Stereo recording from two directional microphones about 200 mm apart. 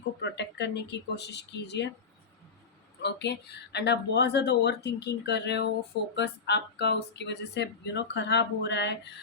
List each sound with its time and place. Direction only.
0.2 s speech: 60° left (ahead or behind)
3.0 s speech: 60° left (ahead or behind)